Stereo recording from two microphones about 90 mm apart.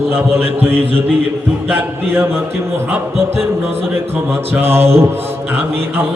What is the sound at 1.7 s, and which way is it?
Speech, 25° right (ahead or behind).